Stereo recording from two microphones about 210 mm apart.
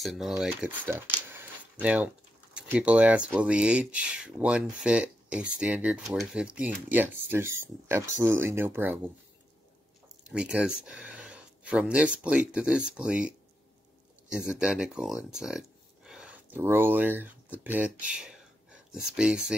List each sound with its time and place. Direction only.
0.0 s speech: centre (ahead or behind)
10.3 s speech: 5° right (ahead or behind)
14.3 s speech: 5° right (ahead or behind)